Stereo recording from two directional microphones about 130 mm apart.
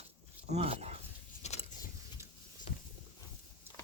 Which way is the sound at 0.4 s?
55° right (ahead or behind).